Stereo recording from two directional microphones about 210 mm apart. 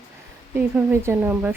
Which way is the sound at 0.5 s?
10° right (ahead or behind).